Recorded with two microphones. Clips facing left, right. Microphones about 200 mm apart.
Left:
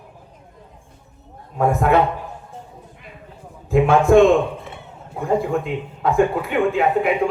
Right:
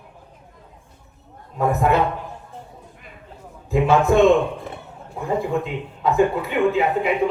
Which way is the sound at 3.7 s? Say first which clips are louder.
Left 3 dB; 55° left (ahead or behind).